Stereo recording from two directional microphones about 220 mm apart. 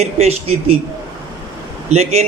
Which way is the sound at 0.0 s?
30° right (ahead or behind).